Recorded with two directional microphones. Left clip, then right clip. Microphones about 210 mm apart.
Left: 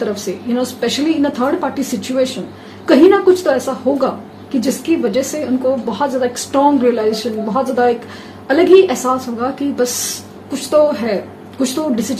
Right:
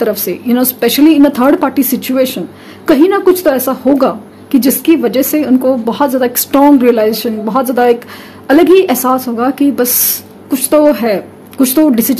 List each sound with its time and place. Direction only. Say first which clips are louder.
0.0 s speech: right 6 dB; 55° right (ahead or behind)